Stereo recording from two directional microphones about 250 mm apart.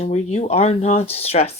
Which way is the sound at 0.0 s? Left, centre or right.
Left.